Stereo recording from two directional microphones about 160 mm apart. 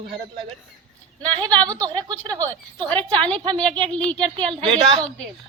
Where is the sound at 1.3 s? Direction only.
25° right (ahead or behind).